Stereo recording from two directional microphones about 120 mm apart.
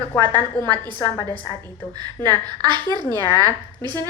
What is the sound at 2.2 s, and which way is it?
Speech, 40° right (ahead or behind).